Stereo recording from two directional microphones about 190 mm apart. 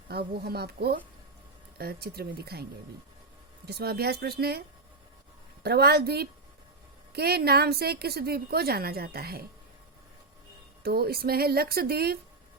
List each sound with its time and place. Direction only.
0.1 s a woman's voice: 55° right (ahead or behind)
3.7 s a woman's voice: 55° right (ahead or behind)
5.6 s a woman's voice: 55° right (ahead or behind)
10.8 s a woman's voice: 55° right (ahead or behind)